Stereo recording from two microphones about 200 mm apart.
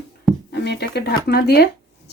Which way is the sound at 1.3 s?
50° left (ahead or behind).